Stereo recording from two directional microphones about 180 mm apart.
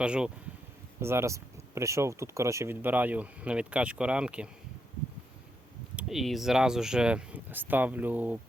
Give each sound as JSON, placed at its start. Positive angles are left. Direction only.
{"t": 0.0, "sound": "speech", "side_deg": -5}
{"t": 6.0, "sound": "speech", "side_deg": 0}